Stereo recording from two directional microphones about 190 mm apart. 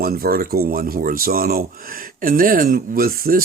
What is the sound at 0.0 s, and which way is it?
Speech, 55° right (ahead or behind).